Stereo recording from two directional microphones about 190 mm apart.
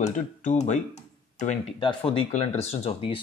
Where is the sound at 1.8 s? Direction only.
25° left (ahead or behind).